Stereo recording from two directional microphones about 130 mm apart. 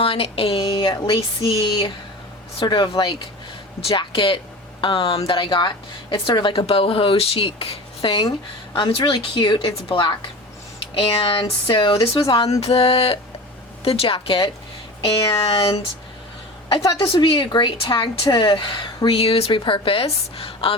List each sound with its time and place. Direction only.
0.0 s a woman's voice: 45° left (ahead or behind)
16.7 s a woman's voice: 30° left (ahead or behind)